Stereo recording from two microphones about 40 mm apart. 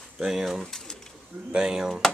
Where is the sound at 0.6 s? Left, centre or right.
Centre.